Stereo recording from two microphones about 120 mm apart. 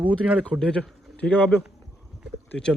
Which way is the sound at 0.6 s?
10° left (ahead or behind).